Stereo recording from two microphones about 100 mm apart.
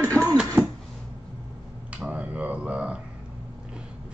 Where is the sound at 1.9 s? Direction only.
10° right (ahead or behind).